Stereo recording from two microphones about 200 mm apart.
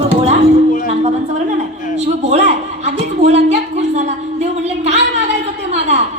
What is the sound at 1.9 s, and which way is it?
A man's voice, 35° right (ahead or behind).